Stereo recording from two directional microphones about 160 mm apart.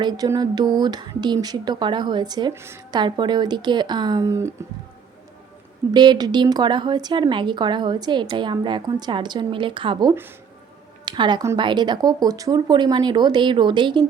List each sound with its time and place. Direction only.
0.0 s a woman's voice: 25° right (ahead or behind)
2.9 s a woman's voice: 25° right (ahead or behind)
5.9 s a woman's voice: 25° right (ahead or behind)